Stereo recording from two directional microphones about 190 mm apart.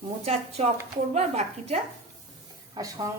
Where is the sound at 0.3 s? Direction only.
30° right (ahead or behind).